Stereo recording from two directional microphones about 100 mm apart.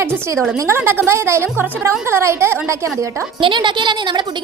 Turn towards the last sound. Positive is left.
turn(degrees=-50)  # may be behind; listen again after turning